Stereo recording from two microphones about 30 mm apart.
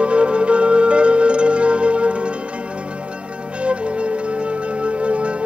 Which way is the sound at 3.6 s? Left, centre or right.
Right.